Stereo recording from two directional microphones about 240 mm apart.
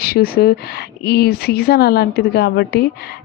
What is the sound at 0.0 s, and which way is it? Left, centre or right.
A woman's voice, left.